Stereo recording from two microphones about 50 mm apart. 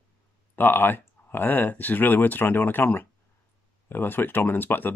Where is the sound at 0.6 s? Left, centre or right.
Left.